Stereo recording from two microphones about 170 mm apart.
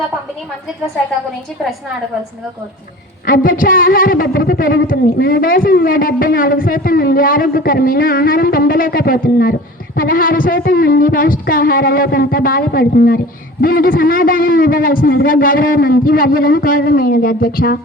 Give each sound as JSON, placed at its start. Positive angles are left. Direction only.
{"t": 3.2, "sound": "a woman's voice", "side_deg": 55}